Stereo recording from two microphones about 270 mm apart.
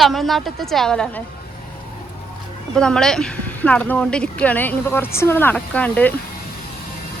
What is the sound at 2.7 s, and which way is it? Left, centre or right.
Speech, centre.